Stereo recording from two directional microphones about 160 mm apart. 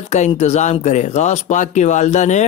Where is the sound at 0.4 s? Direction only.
45° left (ahead or behind).